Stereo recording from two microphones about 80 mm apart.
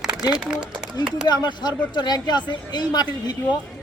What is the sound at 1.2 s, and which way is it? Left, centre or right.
Speech, left.